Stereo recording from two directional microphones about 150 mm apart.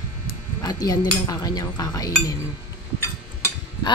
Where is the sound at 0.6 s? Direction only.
25° left (ahead or behind).